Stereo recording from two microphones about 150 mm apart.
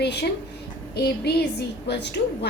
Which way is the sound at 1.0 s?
90° left.